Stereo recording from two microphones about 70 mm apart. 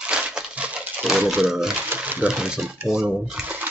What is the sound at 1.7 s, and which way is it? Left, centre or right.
Speech, right.